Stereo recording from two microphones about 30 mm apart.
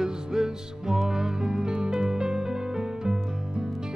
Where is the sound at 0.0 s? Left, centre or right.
Centre.